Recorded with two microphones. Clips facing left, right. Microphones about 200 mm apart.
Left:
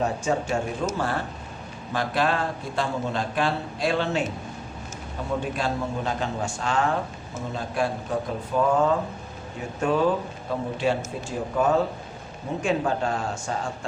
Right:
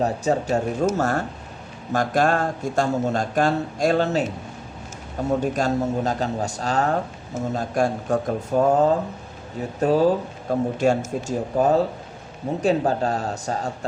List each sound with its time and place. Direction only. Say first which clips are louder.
0.0 s speech: right 3 dB; 35° right (ahead or behind)
5.3 s speech: right 5 dB; 45° right (ahead or behind)